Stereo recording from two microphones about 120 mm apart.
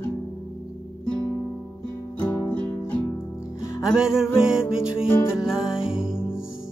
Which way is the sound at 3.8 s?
5° right (ahead or behind).